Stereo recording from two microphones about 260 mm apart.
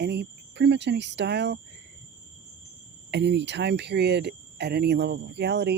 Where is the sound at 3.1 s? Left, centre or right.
Right.